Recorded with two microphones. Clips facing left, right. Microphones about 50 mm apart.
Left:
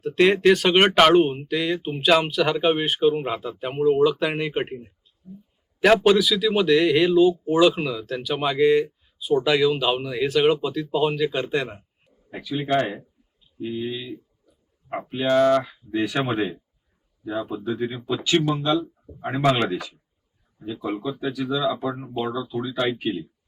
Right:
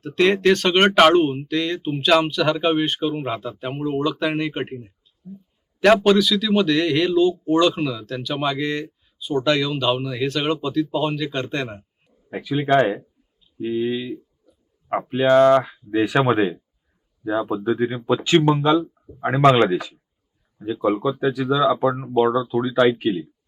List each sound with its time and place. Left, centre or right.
0.2 s speech: centre
12.3 s speech: right
21.2 s speech: right
21.8 s speech: right
22.2 s speech: right
23.1 s speech: centre